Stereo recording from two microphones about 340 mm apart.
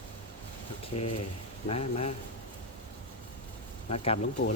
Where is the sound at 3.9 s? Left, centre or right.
Centre.